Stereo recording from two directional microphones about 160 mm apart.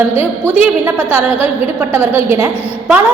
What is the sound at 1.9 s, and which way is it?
Speech, 15° right (ahead or behind).